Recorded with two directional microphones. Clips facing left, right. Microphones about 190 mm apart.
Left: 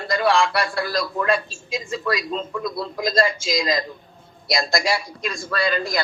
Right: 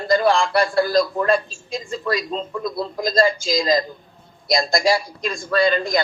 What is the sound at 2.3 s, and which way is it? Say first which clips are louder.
Speech: right 1 dB; 40° right (ahead or behind).